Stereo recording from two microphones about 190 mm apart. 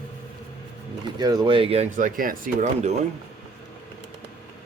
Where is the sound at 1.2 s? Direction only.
20° right (ahead or behind); by 2.9 s 40° right (ahead or behind).